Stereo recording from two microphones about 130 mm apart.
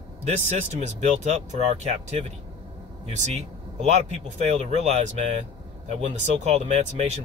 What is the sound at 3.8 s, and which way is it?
Speech, 55° right (ahead or behind).